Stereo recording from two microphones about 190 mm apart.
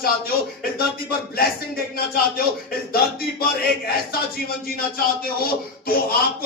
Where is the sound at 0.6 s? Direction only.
50° left (ahead or behind).